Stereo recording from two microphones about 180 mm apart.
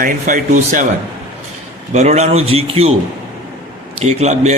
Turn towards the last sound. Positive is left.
turn(degrees=-40)  # may be behind; listen again after turning